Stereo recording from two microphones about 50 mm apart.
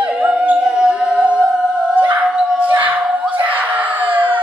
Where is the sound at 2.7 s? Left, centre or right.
Right.